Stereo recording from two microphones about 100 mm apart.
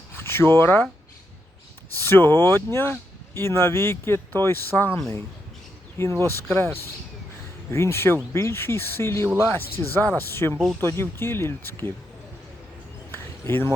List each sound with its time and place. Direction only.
0.3 s speech: 25° left (ahead or behind)
2.0 s speech: 20° left (ahead or behind)
6.2 s speech: 20° left (ahead or behind)
13.1 s a sound: 25° left (ahead or behind)